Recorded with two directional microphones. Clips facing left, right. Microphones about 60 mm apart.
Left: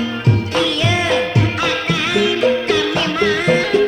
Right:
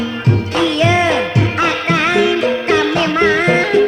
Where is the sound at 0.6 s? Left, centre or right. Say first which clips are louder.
Right 8 dB; right.